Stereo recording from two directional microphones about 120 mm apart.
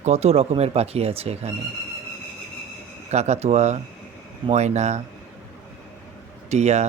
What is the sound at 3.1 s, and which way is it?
Speech, 65° right (ahead or behind).